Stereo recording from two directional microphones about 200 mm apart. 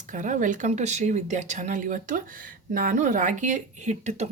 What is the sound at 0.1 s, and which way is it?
Speech, 40° right (ahead or behind).